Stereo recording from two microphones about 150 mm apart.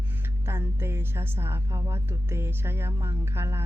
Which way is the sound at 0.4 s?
15° right (ahead or behind).